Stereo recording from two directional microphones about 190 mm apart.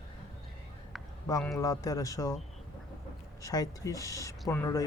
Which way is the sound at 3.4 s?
20° left (ahead or behind).